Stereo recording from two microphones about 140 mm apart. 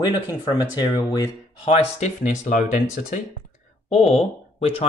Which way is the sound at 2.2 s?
60° left (ahead or behind).